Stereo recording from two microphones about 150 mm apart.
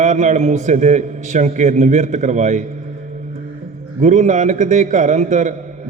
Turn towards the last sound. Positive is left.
turn(degrees=-55)  # may be behind; listen again after turning